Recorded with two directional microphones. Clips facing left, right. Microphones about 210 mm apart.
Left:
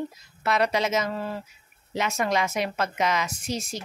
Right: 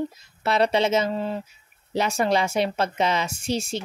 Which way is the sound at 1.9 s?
35° right (ahead or behind).